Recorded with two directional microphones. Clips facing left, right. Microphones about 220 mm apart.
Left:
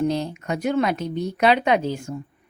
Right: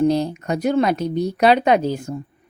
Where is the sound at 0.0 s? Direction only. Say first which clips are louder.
Right 5 dB; 35° right (ahead or behind).